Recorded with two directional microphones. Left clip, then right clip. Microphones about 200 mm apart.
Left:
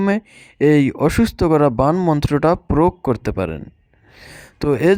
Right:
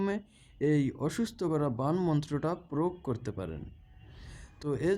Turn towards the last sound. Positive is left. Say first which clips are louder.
# left 16 dB
turn(degrees=45)  # may be behind; listen again after turning